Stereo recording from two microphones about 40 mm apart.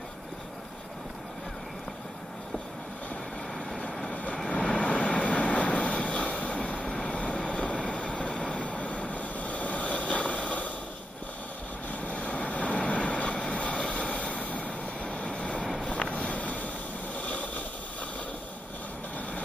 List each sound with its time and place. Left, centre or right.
4.1 s vehicle: left
12.1 s vehicle: left
17.2 s a sound: left